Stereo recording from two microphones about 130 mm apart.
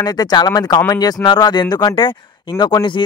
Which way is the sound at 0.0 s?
30° left (ahead or behind).